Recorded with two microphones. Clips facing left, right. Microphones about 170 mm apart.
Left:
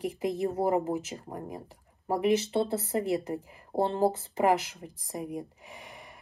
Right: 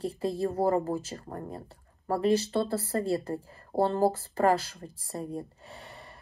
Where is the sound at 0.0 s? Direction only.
15° left (ahead or behind).